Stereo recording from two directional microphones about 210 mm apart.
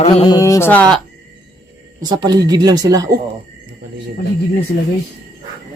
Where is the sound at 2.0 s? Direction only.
20° right (ahead or behind).